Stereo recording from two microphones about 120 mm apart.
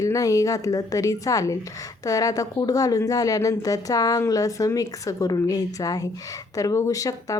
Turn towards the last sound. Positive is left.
turn(degrees=30)  # may be behind; listen again after turning